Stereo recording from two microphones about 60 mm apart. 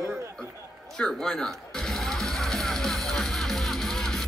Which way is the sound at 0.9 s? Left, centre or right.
Centre.